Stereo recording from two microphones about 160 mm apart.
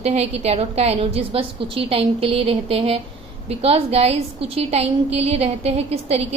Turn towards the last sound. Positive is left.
turn(degrees=-40)  # may be behind; listen again after turning